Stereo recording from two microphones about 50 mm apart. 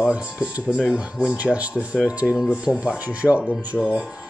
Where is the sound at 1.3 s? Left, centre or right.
Right.